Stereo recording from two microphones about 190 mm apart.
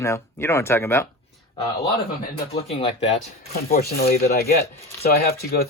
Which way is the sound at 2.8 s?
30° left (ahead or behind).